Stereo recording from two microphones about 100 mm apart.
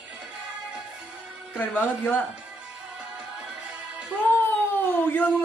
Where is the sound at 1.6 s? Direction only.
15° left (ahead or behind).